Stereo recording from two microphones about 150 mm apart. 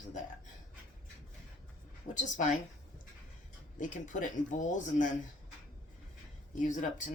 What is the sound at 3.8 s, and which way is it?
Speech, 55° left (ahead or behind).